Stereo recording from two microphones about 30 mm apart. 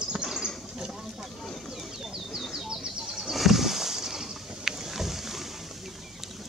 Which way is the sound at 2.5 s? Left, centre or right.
Centre.